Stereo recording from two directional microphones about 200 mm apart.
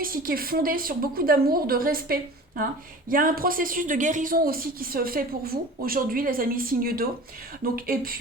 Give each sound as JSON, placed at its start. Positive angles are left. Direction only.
{"t": 0.0, "sound": "speech", "side_deg": -45}